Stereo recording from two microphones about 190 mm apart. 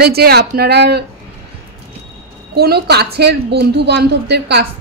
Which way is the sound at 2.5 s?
60° right (ahead or behind).